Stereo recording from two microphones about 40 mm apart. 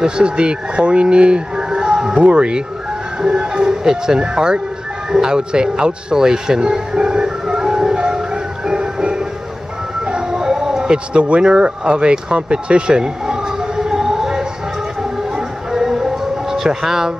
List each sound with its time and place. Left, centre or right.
0.0 s speech: right
8.6 s music: centre
10.0 s howl: centre
11.1 s speech: right; by 14.4 s centre
15.3 s siren: centre